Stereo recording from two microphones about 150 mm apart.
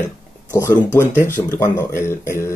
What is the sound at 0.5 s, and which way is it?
Speech, 20° left (ahead or behind).